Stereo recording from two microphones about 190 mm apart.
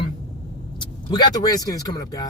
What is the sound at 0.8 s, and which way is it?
Speech, 20° left (ahead or behind).